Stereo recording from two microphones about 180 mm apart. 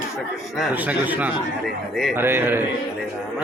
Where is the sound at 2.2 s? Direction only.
10° right (ahead or behind).